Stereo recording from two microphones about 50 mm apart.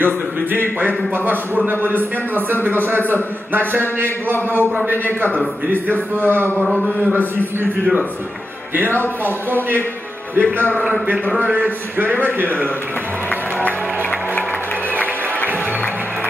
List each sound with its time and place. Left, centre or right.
0.0 s speech: right
3.1 s speech: right
10.3 s speech: right